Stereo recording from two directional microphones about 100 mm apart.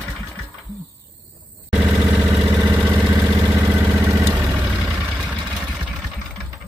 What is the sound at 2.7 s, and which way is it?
Vehicle, 20° right (ahead or behind).